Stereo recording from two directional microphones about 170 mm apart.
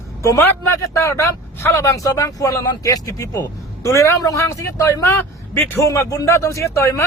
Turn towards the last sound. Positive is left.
turn(degrees=15)  # may be behind; listen again after turning